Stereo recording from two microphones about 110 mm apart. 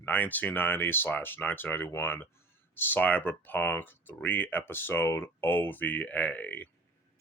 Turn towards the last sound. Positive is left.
turn(degrees=15)  # may be behind; listen again after turning